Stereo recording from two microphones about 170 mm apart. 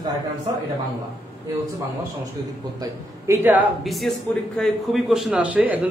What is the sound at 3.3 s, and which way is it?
Speech, 10° right (ahead or behind).